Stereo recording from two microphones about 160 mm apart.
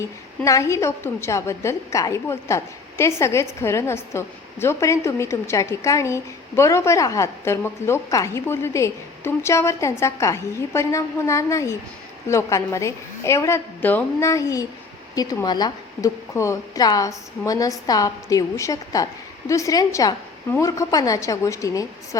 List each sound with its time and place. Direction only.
0.0 s a woman's voice: 20° left (ahead or behind)